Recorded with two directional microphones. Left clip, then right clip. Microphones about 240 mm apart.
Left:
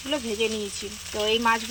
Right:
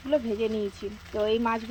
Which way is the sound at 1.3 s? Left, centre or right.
Centre.